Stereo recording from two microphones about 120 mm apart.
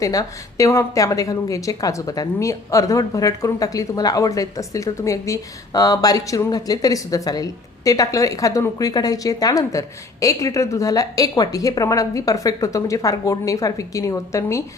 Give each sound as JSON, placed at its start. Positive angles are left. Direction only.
{"t": 0.0, "sound": "a woman's voice", "side_deg": 25}